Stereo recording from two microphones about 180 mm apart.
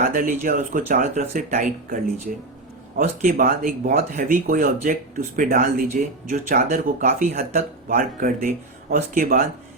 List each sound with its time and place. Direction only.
0.0 s speech: 50° right (ahead or behind)